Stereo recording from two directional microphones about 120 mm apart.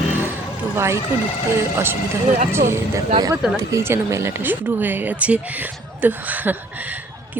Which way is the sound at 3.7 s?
20° right (ahead or behind).